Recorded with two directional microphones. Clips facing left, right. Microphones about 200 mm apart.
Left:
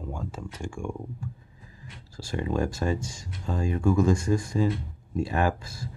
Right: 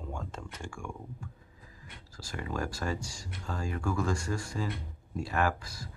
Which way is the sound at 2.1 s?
25° left (ahead or behind).